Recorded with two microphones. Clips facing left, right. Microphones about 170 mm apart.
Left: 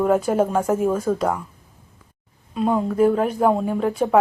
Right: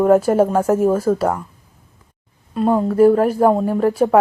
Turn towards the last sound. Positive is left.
turn(degrees=-5)  # may be behind; listen again after turning